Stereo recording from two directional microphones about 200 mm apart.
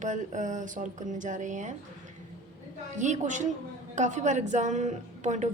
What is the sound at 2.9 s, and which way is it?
Speech, 35° right (ahead or behind).